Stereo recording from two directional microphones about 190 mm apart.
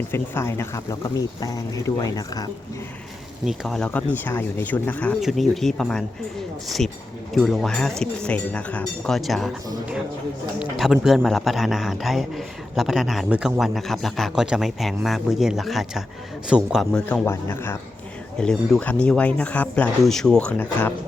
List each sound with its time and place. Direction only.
0.1 s a man's voice: 15° left (ahead or behind)
3.4 s a man's voice: centre (ahead or behind)
10.8 s a man's voice: centre (ahead or behind)